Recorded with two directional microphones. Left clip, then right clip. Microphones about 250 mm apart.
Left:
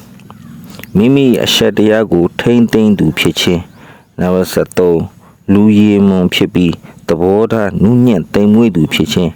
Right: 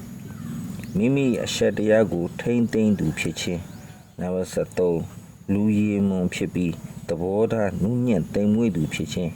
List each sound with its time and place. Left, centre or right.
0.8 s speech: left